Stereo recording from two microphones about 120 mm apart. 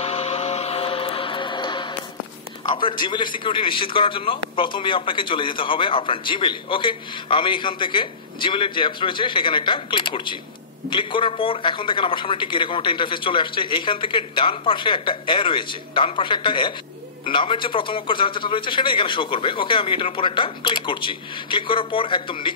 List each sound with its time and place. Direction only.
0.0 s music: 60° left (ahead or behind); by 1.9 s 40° left (ahead or behind)
2.7 s a man's voice: 40° left (ahead or behind)